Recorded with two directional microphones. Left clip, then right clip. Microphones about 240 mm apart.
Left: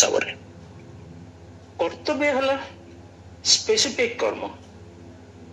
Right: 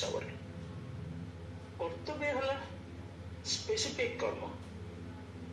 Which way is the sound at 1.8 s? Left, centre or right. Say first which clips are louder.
Left 14 dB; left.